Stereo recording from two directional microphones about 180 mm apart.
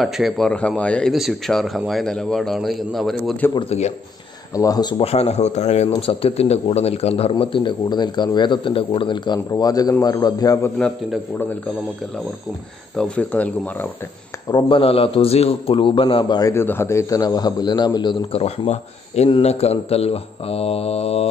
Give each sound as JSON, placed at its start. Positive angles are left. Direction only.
{"t": 0.0, "sound": "speech", "side_deg": 0}
{"t": 3.5, "sound": "speech", "side_deg": 35}
{"t": 4.6, "sound": "a man's voice", "side_deg": 20}
{"t": 10.8, "sound": "speech", "side_deg": 5}
{"t": 12.9, "sound": "speech", "side_deg": 5}
{"t": 14.5, "sound": "a man's voice", "side_deg": 30}